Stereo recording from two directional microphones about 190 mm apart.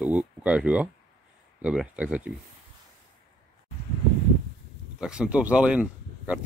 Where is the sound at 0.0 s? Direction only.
5° right (ahead or behind).